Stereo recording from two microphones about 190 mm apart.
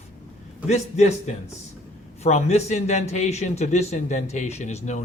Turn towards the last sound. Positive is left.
turn(degrees=40)  # may be behind; listen again after turning